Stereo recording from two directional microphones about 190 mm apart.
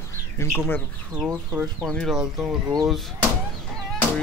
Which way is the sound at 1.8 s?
Centre (ahead or behind).